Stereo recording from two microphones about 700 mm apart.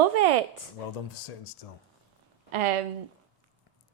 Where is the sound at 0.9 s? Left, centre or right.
Left.